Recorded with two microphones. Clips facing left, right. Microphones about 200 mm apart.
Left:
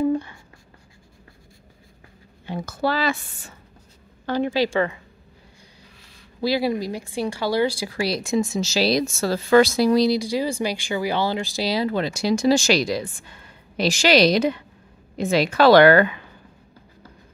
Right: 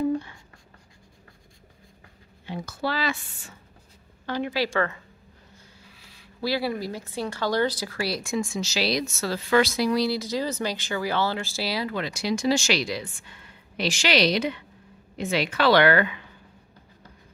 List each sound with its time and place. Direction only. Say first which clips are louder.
2.8 s speech: left 5 dB; 45° left (ahead or behind)
4.3 s speech: left 6 dB; 35° left (ahead or behind)
4.7 s speech: left 4 dB; 15° left (ahead or behind)
6.4 s speech: left 5 dB; 15° left (ahead or behind)
8.5 s speech: left 6 dB; 35° left (ahead or behind)
10.0 s speech: left 5 dB; 15° left (ahead or behind)
11.9 s speech: left 5 dB; 35° left (ahead or behind)